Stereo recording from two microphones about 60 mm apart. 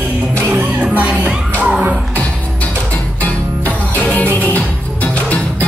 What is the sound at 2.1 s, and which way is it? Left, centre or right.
Music, left.